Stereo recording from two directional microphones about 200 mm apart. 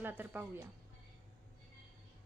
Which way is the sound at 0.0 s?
10° right (ahead or behind).